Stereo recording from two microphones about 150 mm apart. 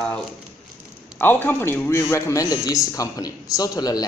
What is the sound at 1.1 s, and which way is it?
A man's voice, 10° left (ahead or behind).